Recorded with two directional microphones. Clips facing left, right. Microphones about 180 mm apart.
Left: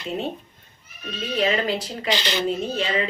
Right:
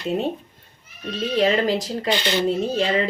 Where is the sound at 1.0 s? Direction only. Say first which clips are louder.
Right 4 dB; 40° right (ahead or behind).